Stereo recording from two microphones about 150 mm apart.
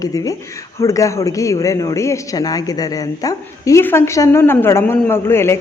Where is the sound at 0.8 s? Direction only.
20° left (ahead or behind).